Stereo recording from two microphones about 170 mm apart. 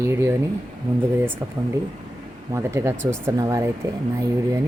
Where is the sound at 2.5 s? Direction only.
15° right (ahead or behind).